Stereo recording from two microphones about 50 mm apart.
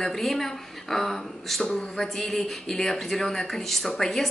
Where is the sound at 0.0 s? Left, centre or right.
Centre.